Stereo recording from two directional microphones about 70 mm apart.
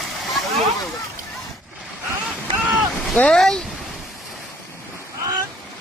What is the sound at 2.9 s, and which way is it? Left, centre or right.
Boat, centre.